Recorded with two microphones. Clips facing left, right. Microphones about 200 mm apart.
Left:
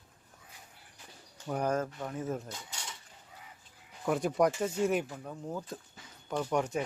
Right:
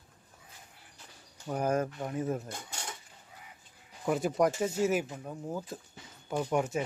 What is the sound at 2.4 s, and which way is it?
Cutlery, 55° right (ahead or behind).